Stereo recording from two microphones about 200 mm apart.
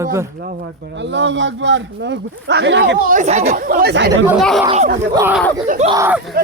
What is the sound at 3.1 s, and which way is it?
Speech, 35° right (ahead or behind).